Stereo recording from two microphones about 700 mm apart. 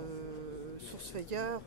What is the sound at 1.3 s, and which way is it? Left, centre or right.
Speech, right.